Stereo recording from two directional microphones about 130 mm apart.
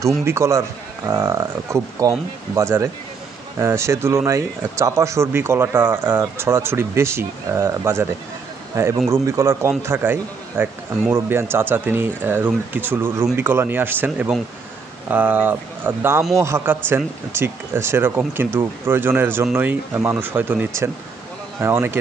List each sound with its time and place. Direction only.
0.2 s a man's voice: 20° right (ahead or behind)